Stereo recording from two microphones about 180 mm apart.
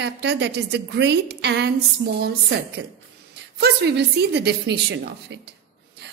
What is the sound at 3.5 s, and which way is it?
A woman's voice, 70° right (ahead or behind).